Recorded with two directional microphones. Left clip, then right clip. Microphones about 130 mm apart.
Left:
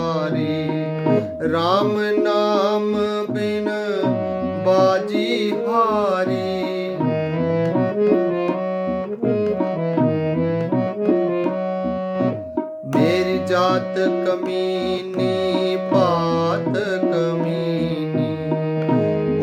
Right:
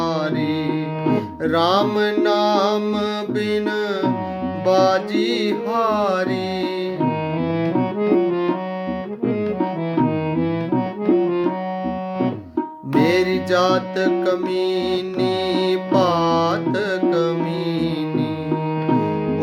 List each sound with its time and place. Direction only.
1.1 s music: 25° right (ahead or behind)
4.6 s music: 25° right (ahead or behind)
7.6 s music: 15° left (ahead or behind)
13.0 s music: 25° right (ahead or behind)